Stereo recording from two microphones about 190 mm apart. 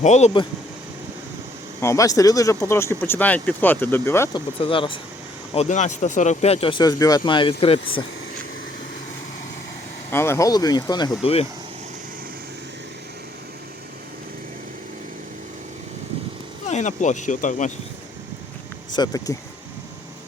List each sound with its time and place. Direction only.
0.0 s speech: 35° left (ahead or behind)
1.8 s speech: 15° left (ahead or behind)
4.6 s speech: 25° left (ahead or behind)
5.5 s speech: 40° left (ahead or behind)
10.1 s speech: 10° left (ahead or behind); by 11.4 s 30° left (ahead or behind)
16.6 s speech: 40° left (ahead or behind)
18.9 s speech: 20° left (ahead or behind)